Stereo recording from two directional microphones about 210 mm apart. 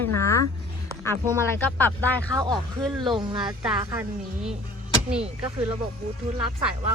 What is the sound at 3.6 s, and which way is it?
Speech, 5° right (ahead or behind).